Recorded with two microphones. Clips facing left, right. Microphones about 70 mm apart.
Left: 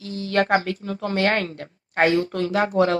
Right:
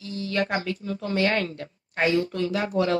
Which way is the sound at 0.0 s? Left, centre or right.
Left.